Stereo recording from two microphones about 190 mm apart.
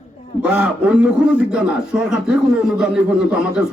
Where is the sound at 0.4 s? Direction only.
10° right (ahead or behind).